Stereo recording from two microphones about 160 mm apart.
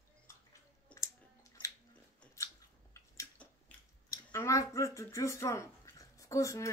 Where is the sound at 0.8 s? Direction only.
20° left (ahead or behind).